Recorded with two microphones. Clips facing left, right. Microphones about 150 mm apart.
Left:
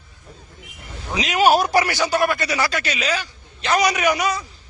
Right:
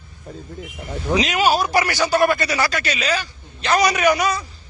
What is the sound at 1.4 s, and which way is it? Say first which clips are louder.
Speech: left 6 dB; 55° left (ahead or behind).